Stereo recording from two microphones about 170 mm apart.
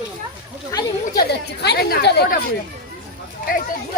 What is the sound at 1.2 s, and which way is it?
A woman's voice, 75° left (ahead or behind).